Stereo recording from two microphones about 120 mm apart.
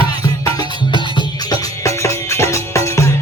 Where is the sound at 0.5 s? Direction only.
35° left (ahead or behind).